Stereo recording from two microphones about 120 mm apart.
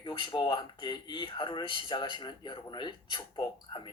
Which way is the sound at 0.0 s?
40° left (ahead or behind).